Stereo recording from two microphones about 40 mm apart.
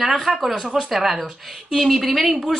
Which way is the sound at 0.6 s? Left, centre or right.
Centre.